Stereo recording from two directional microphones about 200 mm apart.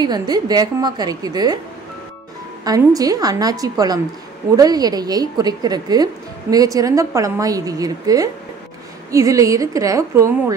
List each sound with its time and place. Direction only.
0.0 s a woman's voice: 20° right (ahead or behind)
2.6 s a woman's voice: 20° right (ahead or behind)